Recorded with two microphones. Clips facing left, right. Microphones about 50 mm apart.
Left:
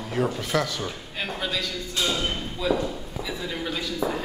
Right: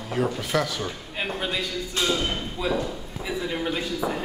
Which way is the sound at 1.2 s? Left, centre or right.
Centre.